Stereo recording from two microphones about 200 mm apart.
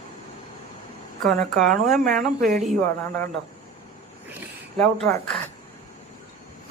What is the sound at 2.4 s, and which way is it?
Speech, 40° right (ahead or behind).